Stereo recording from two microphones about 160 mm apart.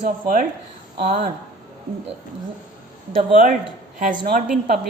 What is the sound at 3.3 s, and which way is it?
A woman's voice, 60° right (ahead or behind).